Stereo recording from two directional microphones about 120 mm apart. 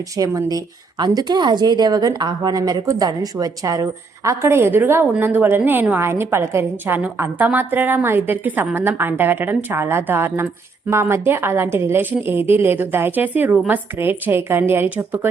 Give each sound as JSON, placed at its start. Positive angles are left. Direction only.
{"t": 0.2, "sound": "a woman's voice", "side_deg": -30}